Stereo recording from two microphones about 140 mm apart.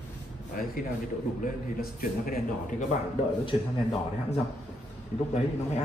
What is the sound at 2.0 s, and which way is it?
Speech, 80° left.